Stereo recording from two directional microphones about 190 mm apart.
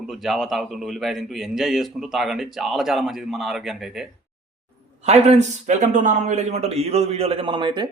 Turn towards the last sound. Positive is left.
turn(degrees=-25)  # may be behind; listen again after turning